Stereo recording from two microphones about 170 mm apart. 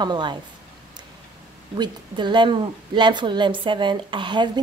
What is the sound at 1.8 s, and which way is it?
A woman's voice, 25° right (ahead or behind).